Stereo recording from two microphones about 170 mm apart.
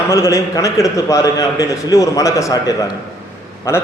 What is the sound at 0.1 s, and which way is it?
A man's voice, 20° left (ahead or behind).